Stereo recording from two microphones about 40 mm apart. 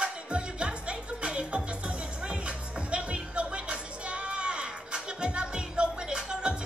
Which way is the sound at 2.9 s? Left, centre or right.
Right.